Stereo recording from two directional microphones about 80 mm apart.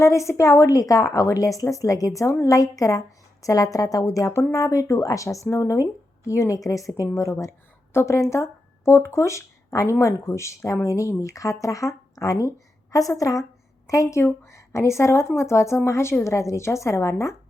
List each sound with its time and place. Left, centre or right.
0.0 s a woman's voice: left
4.3 s speech: left
4.5 s a woman's voice: left